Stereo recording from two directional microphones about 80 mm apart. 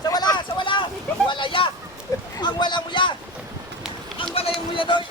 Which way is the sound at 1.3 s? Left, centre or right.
Left.